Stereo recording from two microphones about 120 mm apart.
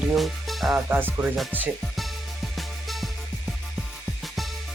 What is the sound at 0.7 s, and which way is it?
Music, 15° right (ahead or behind).